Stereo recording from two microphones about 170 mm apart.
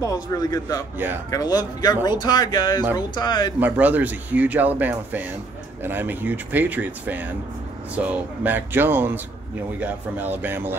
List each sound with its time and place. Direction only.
0.0 s a man's voice: 20° left (ahead or behind)
0.9 s speech: 10° right (ahead or behind)
1.3 s a man's voice: 20° left (ahead or behind)
3.5 s speech: 10° right (ahead or behind)